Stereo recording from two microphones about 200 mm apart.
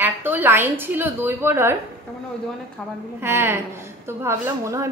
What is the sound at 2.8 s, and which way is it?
Speech, 5° left (ahead or behind).